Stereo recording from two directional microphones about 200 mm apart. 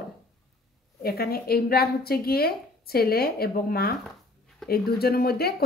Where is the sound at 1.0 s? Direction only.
50° left (ahead or behind).